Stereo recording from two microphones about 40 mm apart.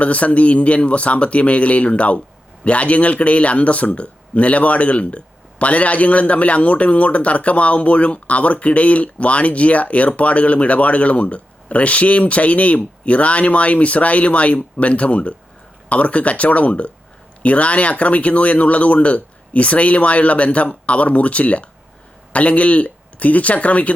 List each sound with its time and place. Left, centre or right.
0.0 s speech: left